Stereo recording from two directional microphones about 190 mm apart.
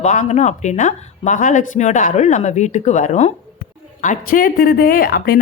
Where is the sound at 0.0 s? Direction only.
40° left (ahead or behind).